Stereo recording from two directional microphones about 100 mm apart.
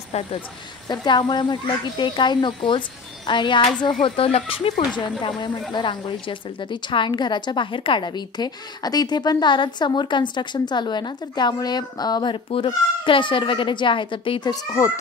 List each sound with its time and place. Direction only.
0.8 s a woman's voice: 45° left (ahead or behind); by 5.0 s 70° left (ahead or behind)
5.4 s a woman's voice: 50° left (ahead or behind)
12.4 s speech: 60° left (ahead or behind)
14.4 s speech: 35° left (ahead or behind)